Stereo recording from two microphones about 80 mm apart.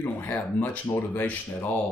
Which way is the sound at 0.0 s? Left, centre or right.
Left.